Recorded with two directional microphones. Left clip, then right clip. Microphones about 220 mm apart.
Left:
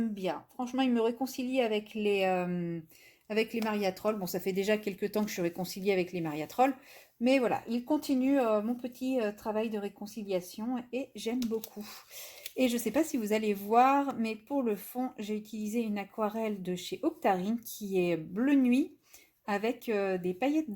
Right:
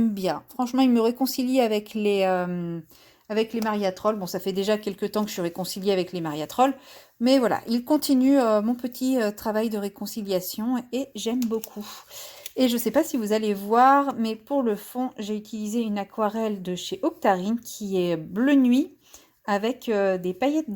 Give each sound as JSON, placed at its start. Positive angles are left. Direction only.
{"t": 0.1, "sound": "speech", "side_deg": -40}
{"t": 7.3, "sound": "speech", "side_deg": -30}